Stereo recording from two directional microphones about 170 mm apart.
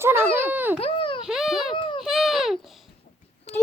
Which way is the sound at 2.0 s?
Centre (ahead or behind).